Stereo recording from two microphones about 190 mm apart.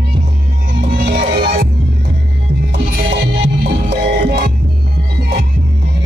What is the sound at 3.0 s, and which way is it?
Music, 55° right (ahead or behind).